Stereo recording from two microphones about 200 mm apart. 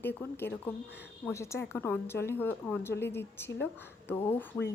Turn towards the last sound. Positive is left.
turn(degrees=10)  # may be behind; listen again after turning